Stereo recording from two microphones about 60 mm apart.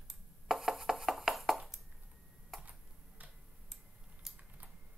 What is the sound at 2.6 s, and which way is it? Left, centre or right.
Computer keyboard, right.